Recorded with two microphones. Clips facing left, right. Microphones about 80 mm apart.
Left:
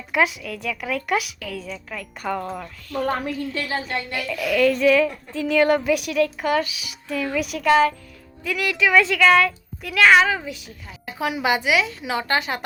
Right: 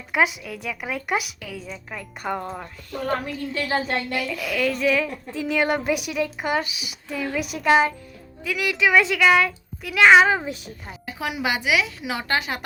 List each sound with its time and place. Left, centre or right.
0.1 s a woman's voice: centre
4.3 s a woman's voice: centre
10.2 s a woman's voice: right
11.0 s a woman's voice: centre